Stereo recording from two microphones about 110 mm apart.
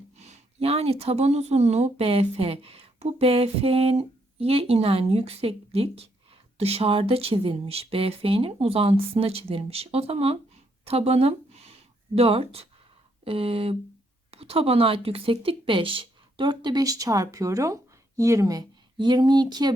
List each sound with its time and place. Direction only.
0.2 s speech: 80° right
10.8 s a sound: 65° right (ahead or behind)
13.2 s a woman's voice: 55° right (ahead or behind); by 18.6 s 30° right (ahead or behind)
18.9 s speech: 45° right (ahead or behind)